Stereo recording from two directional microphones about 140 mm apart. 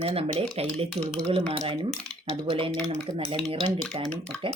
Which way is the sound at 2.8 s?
50° right (ahead or behind).